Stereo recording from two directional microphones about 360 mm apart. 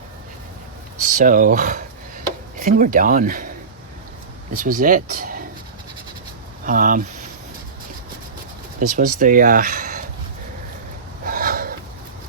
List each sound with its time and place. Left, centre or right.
1.0 s speech: right
4.5 s speech: right
6.7 s speech: right
8.8 s speech: right
11.3 s a sound: right